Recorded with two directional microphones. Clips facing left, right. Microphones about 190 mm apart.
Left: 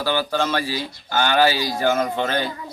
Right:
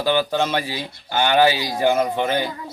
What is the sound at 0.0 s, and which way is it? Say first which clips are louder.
Speech: right 2 dB; 20° right (ahead or behind).